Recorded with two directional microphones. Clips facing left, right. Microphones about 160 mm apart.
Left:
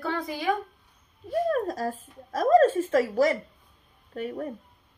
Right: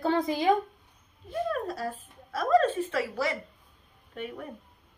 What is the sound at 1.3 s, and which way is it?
Speech, 40° left (ahead or behind).